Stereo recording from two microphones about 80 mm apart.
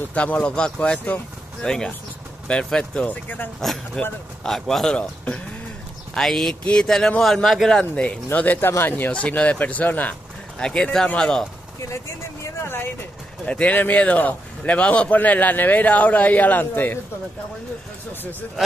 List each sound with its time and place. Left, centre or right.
0.1 s speech: centre
3.6 s speech: centre
7.9 s a man's voice: centre
10.6 s speech: centre
13.5 s a man's voice: centre